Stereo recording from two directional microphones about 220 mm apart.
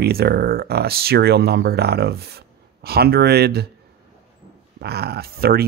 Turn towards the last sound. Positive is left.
turn(degrees=-45)  # may be behind; listen again after turning